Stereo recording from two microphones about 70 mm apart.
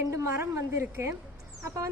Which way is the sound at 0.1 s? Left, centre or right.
Right.